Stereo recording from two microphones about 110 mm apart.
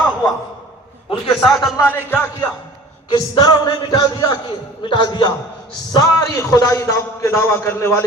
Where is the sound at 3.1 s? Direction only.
40° left (ahead or behind).